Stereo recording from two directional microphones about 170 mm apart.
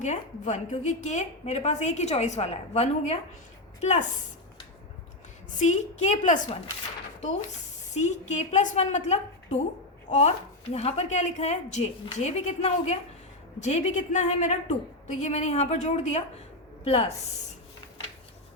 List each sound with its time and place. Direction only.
0.0 s a woman's voice: 45° left (ahead or behind)
5.5 s a woman's voice: 45° left (ahead or behind)
7.9 s a woman's voice: 40° left (ahead or behind)